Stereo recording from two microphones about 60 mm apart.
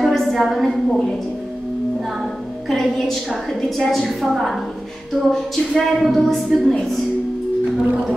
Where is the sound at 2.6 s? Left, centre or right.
Centre.